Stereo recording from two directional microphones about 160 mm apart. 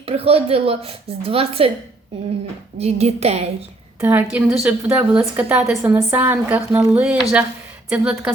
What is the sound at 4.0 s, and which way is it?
A woman's voice, 10° right (ahead or behind).